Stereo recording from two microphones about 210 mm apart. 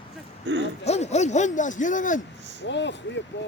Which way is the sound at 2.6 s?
55° left (ahead or behind).